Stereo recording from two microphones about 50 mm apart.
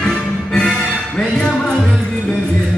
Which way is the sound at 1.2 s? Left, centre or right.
Centre.